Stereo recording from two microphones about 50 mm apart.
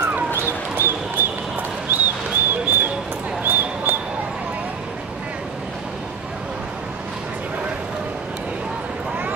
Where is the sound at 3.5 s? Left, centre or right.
Right.